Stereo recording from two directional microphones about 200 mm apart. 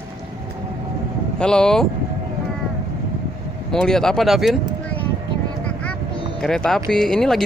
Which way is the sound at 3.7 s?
5° left (ahead or behind).